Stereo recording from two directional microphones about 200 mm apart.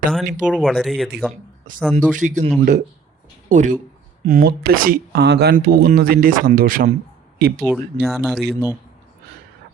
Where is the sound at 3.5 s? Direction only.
40° right (ahead or behind).